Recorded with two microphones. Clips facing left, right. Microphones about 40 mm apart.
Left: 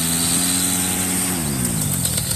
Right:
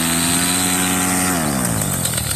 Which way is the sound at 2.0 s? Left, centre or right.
Right.